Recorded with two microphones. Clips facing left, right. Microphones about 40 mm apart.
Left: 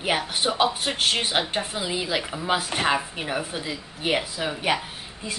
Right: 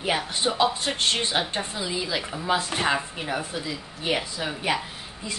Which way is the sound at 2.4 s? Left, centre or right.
Centre.